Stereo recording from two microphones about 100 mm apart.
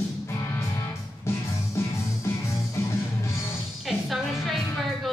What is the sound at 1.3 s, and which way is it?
Music, 25° left (ahead or behind).